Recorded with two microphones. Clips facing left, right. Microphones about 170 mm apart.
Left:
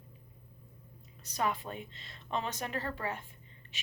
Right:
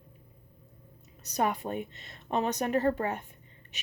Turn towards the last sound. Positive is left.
turn(degrees=-45)  # may be behind; listen again after turning